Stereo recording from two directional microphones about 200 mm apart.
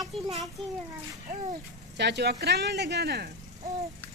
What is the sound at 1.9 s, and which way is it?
Speech, 55° right (ahead or behind).